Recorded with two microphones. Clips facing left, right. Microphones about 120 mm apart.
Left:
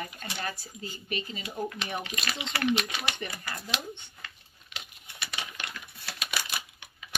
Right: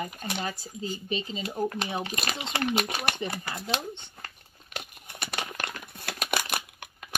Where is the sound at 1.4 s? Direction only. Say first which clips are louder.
Right 5 dB; 45° right (ahead or behind).